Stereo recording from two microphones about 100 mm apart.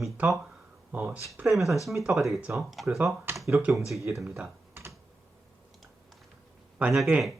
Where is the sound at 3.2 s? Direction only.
30° right (ahead or behind).